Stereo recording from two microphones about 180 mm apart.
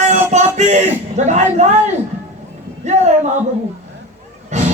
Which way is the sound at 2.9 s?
40° right (ahead or behind).